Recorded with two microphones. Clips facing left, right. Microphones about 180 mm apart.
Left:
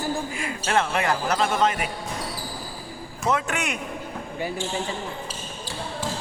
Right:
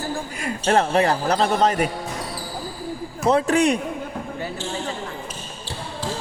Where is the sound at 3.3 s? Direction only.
35° right (ahead or behind).